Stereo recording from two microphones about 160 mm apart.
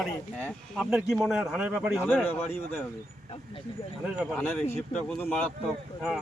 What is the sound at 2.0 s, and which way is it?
Speech, 10° left (ahead or behind).